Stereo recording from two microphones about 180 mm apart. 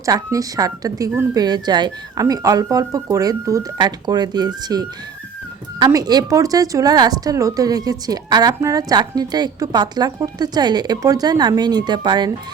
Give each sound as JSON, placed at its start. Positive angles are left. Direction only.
{"t": 0.0, "sound": "a woman's voice", "side_deg": -20}